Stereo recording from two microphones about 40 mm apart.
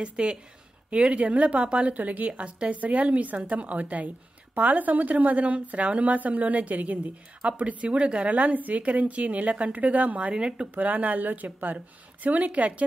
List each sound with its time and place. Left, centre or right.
0.0 s a woman's voice: right
10.3 s speech: right
10.7 s a woman's voice: right